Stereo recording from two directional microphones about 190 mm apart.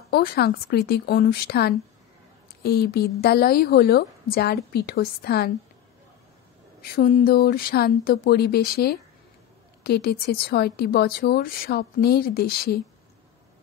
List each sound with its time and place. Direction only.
0.1 s a woman's voice: 55° left (ahead or behind)
6.8 s a woman's voice: 50° left (ahead or behind)